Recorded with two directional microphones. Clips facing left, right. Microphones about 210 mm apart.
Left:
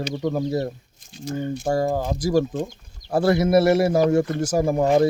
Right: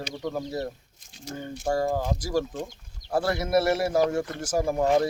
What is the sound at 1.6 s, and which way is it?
Speech, 20° left (ahead or behind).